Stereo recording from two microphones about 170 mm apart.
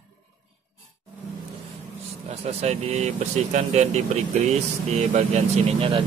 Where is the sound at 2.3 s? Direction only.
40° right (ahead or behind).